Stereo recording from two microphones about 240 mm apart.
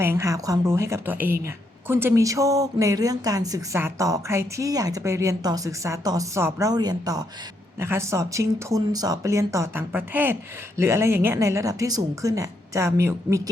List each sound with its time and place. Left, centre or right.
0.0 s speech: centre